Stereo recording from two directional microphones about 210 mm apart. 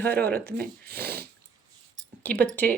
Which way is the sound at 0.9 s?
45° right (ahead or behind).